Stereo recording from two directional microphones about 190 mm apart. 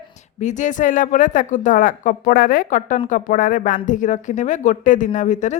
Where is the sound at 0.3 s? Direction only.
40° left (ahead or behind).